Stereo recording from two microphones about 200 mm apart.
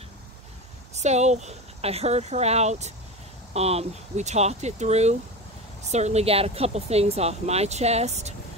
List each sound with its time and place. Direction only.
0.9 s speech: 35° right (ahead or behind)